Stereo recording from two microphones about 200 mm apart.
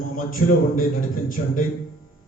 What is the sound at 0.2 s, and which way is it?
A man's voice, 45° left (ahead or behind).